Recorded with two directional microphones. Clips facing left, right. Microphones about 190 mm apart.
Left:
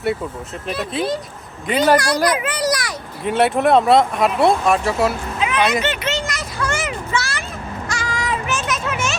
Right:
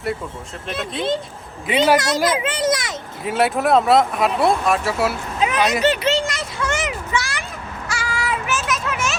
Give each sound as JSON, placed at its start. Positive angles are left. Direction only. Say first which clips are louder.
{"t": 1.6, "sound": "speech", "louder": "left 1 dB", "side_deg": -5}
{"t": 2.0, "sound": "a child's voice", "louder": "left 1 dB", "side_deg": -25}
{"t": 3.2, "sound": "speech", "louder": "left 2 dB", "side_deg": 0}
{"t": 5.4, "sound": "a sound", "louder": "right 1 dB", "side_deg": -40}
{"t": 7.9, "sound": "music", "louder": "even", "side_deg": -10}